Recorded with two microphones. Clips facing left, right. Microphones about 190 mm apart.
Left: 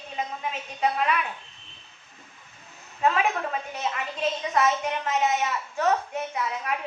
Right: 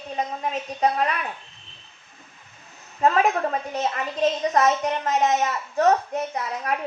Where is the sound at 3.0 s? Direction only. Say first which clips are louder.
Right 4 dB; 40° right (ahead or behind).